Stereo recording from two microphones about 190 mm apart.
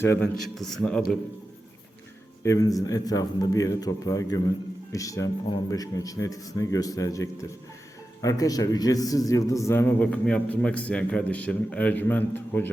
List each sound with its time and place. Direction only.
0.0 s a man's voice: 10° left (ahead or behind)
0.3 s a man's voice: centre (ahead or behind)
2.4 s a man's voice: 15° left (ahead or behind)